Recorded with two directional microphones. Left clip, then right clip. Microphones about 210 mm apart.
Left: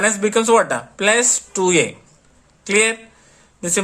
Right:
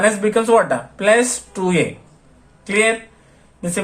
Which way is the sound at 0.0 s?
30° left (ahead or behind).